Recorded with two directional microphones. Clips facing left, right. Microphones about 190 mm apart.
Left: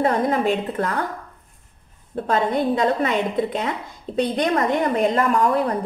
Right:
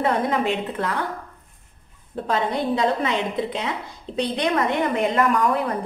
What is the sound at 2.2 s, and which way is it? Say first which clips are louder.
A woman's voice: left 3 dB; 50° left (ahead or behind).